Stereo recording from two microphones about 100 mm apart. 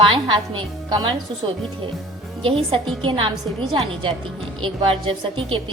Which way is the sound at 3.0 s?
60° right (ahead or behind).